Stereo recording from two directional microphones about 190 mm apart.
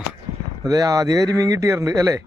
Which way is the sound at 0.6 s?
20° right (ahead or behind).